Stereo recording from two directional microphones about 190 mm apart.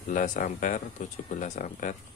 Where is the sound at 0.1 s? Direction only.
40° left (ahead or behind).